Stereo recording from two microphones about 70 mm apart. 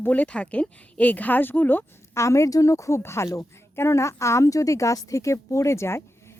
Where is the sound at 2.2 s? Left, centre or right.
Left.